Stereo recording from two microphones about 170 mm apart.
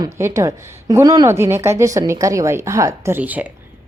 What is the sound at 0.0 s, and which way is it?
A woman's voice, 15° right (ahead or behind).